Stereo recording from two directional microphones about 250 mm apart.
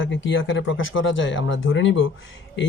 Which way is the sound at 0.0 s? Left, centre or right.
Left.